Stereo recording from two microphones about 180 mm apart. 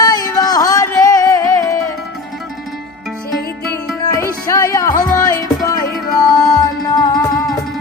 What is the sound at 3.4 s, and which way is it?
Music, 55° left (ahead or behind).